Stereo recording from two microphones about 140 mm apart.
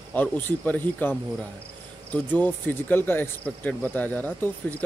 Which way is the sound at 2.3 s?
15° left (ahead or behind).